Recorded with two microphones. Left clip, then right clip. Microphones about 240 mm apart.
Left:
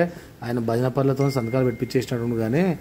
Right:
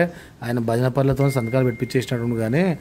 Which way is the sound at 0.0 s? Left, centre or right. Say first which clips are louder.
Right 2 dB; right.